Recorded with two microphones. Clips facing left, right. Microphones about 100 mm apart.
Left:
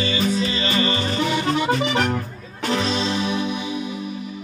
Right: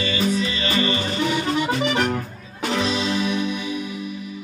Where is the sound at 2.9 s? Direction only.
35° left (ahead or behind).